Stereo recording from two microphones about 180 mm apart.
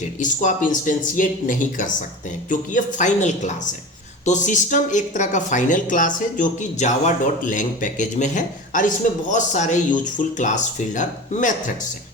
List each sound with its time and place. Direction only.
0.0 s speech: 45° left (ahead or behind)